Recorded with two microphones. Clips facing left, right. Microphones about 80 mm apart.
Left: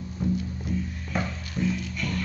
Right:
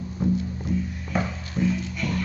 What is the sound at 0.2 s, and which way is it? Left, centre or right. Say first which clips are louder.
Music: right 3 dB; right.